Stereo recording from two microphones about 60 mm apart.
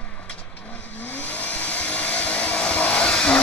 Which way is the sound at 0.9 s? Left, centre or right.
Left.